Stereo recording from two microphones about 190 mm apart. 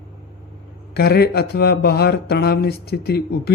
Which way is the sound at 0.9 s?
55° left (ahead or behind).